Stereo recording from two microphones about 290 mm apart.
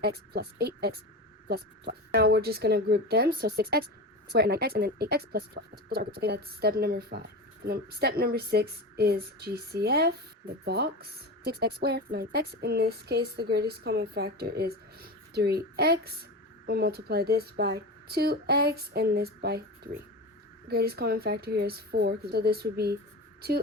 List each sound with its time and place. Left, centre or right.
0.0 s speech: right